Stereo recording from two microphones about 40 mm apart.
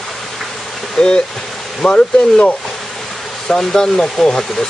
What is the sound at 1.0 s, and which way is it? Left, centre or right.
Speech, centre.